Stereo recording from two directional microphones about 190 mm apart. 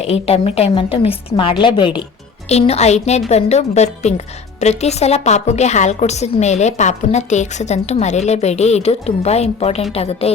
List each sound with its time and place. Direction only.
0.0 s a woman's voice: 35° left (ahead or behind)
2.5 s a woman's voice: 35° left (ahead or behind)